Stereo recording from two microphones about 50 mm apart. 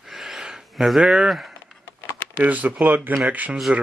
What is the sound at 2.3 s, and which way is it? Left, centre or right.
Speech, right.